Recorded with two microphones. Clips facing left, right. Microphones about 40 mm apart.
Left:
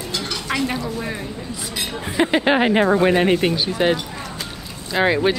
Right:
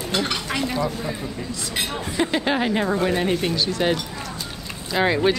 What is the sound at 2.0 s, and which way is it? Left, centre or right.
Speech, left.